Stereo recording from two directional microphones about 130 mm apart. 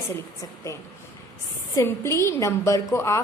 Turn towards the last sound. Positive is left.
turn(degrees=20)  # may be behind; listen again after turning